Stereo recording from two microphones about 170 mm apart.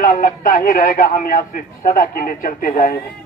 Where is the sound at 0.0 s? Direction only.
55° left (ahead or behind).